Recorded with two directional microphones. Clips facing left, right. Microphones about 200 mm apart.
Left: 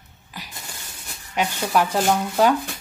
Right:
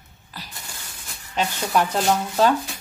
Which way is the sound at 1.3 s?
10° left (ahead or behind).